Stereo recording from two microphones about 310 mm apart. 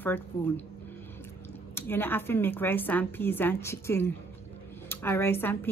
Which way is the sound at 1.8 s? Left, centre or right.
Centre.